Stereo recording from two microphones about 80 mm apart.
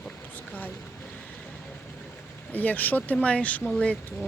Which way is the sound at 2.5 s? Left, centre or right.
Left.